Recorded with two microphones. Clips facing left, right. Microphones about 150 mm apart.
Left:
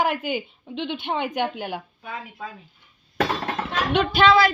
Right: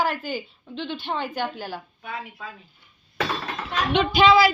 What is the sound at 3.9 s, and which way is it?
Speech, 10° left (ahead or behind).